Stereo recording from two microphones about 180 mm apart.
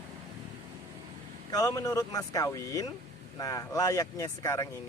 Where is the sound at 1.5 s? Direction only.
20° left (ahead or behind).